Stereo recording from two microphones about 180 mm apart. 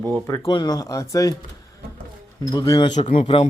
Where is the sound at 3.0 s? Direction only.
35° left (ahead or behind).